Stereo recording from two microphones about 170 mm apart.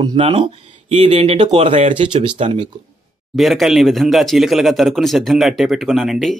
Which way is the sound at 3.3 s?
Centre (ahead or behind).